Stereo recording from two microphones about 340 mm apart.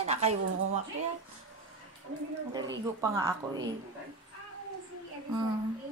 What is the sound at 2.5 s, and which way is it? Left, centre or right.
Speech, centre.